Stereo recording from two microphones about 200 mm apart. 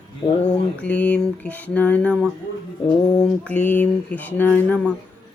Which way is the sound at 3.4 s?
5° left (ahead or behind).